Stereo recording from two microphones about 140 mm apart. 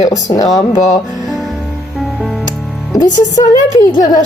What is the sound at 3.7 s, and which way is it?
Speech, 25° left (ahead or behind).